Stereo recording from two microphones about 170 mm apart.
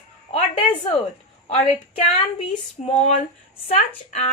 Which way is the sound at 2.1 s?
40° left (ahead or behind).